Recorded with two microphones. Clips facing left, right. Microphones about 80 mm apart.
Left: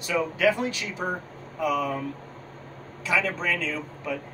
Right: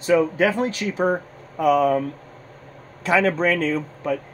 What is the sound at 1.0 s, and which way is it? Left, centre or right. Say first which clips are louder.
Speech: right 9 dB; right.